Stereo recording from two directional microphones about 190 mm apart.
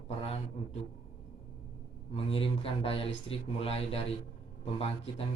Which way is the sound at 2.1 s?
30° left (ahead or behind).